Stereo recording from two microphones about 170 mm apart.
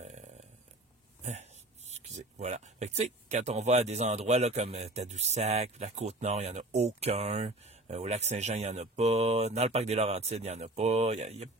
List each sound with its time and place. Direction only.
1.2 s speech: 40° right (ahead or behind)